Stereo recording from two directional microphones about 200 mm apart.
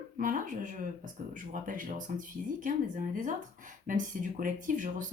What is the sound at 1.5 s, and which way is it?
Speech, 40° right (ahead or behind).